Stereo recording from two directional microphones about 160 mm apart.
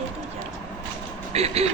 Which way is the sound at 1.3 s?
40° right (ahead or behind).